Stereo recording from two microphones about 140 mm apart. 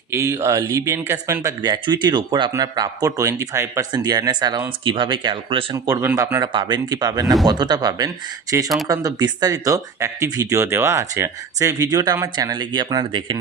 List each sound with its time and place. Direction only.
0.1 s speech: 20° right (ahead or behind); by 5.6 s 35° right (ahead or behind)
5.7 s speech: 25° right (ahead or behind)
6.4 s speech: 35° right (ahead or behind); by 12.5 s 20° right (ahead or behind)
12.5 s speech: 30° right (ahead or behind)